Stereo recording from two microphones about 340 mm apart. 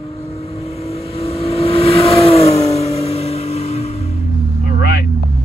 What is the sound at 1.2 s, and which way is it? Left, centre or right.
Vehicle, centre.